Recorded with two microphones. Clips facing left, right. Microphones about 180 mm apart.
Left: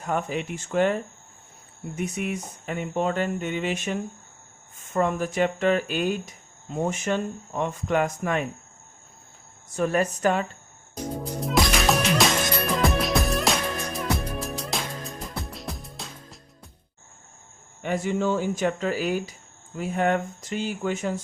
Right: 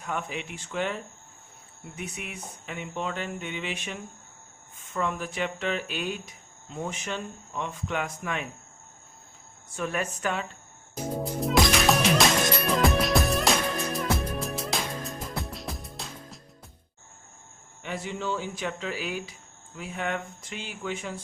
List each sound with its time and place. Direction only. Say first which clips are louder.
0.0 s speech: left 6 dB; 40° left (ahead or behind)
9.7 s a woman's voice: left 7 dB; 40° left (ahead or behind)
11.2 s music: right 1 dB; centre (ahead or behind)
17.8 s speech: left 7 dB; 50° left (ahead or behind)